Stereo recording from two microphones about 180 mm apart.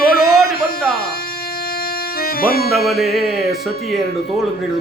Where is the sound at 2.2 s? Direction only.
55° left (ahead or behind).